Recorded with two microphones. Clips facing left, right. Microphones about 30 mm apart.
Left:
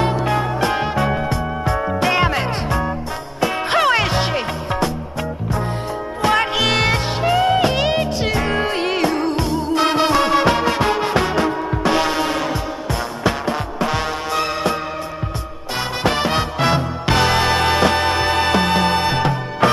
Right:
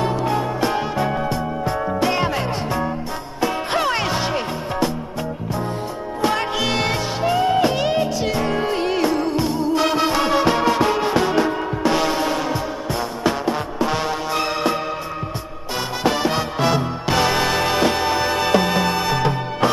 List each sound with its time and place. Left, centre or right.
0.1 s music: left
6.5 s music: centre
7.0 s music: left
9.1 s music: left
9.9 s music: centre
15.7 s music: left